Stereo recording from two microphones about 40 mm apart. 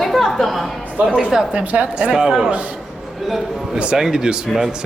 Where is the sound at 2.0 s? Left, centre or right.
Centre.